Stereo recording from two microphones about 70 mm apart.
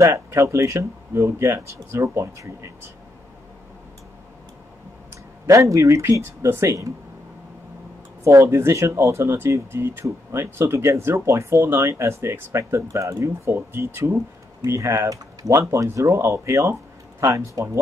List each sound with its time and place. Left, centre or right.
0.0 s speech: right
5.5 s speech: right
8.2 s speech: right
14.8 s speech: right